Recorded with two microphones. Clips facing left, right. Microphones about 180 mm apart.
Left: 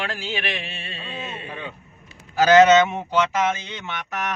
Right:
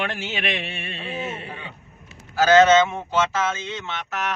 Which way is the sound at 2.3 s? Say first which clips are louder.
Left 1 dB; 15° left (ahead or behind).